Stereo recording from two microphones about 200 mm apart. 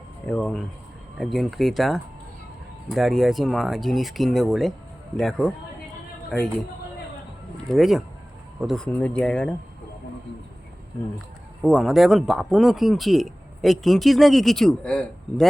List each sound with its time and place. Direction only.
0.3 s speech: 5° left (ahead or behind)
7.7 s speech: centre (ahead or behind)
11.6 s speech: centre (ahead or behind)